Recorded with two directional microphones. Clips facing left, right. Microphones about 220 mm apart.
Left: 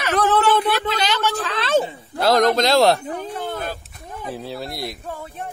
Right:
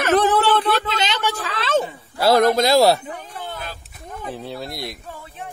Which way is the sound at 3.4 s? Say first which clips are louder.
Left 5 dB; 45° left (ahead or behind).